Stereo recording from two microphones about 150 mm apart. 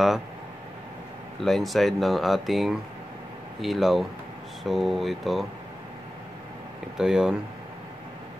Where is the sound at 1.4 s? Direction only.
Centre (ahead or behind).